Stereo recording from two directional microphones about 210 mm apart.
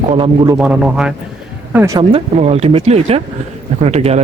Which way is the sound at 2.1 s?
30° right (ahead or behind).